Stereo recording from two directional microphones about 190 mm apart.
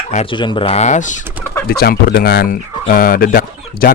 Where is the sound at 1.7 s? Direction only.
50° left (ahead or behind).